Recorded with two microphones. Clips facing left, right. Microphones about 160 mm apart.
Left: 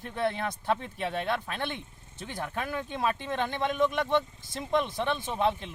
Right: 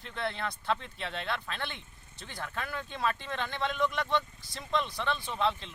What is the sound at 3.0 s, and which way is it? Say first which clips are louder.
Speech: left 3 dB; 15° left (ahead or behind).